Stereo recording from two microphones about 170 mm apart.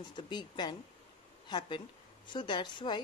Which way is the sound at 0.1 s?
25° left (ahead or behind).